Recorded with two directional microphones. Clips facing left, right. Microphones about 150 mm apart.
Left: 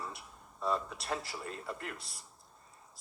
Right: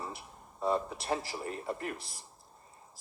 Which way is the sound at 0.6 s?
25° right (ahead or behind).